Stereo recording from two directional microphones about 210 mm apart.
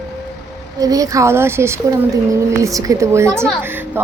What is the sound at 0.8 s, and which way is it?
A woman's voice, 15° right (ahead or behind).